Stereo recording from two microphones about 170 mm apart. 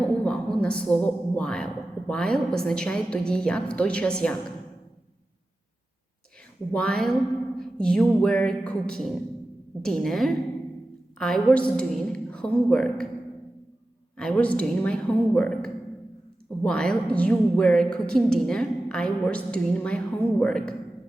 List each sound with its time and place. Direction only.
0.0 s a woman's voice: 5° left (ahead or behind)
6.7 s a woman's voice: 5° left (ahead or behind)
14.2 s a woman's voice: 5° left (ahead or behind)